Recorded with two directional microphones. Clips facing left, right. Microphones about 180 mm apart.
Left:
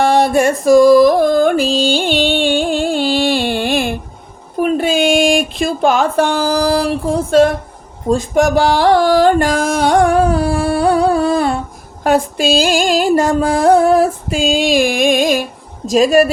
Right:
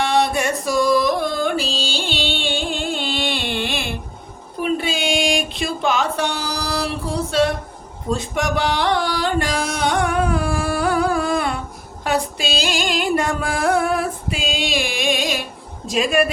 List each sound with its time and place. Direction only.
0.0 s music: 50° left (ahead or behind)
4.6 s a sound: 50° left (ahead or behind); by 11.5 s 30° left (ahead or behind)
12.0 s music: 50° left (ahead or behind)
15.9 s a woman's voice: 40° left (ahead or behind)